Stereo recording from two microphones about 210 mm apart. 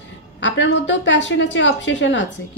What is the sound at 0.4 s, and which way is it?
A woman's voice, 60° left (ahead or behind).